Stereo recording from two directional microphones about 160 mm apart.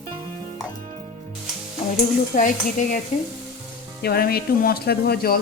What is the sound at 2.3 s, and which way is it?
Stir, 55° left (ahead or behind).